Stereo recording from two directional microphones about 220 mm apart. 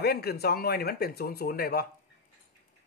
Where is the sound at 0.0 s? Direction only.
45° left (ahead or behind).